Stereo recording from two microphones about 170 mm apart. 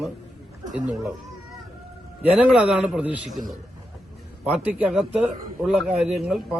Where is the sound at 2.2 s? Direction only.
5° right (ahead or behind).